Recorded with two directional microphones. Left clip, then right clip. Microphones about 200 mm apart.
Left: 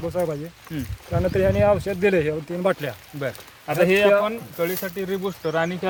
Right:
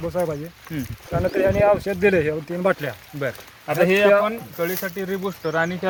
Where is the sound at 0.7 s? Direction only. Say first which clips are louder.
Right 2 dB; 20° right (ahead or behind).